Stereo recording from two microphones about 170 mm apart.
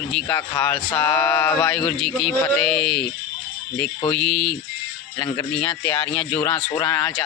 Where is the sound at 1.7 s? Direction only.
5° left (ahead or behind).